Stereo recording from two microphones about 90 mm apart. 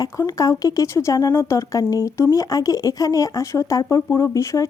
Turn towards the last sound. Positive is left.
turn(degrees=35)  # may be behind; listen again after turning